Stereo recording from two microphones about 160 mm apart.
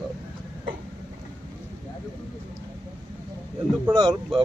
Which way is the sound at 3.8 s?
25° right (ahead or behind).